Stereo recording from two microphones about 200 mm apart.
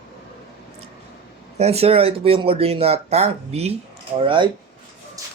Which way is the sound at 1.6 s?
30° right (ahead or behind).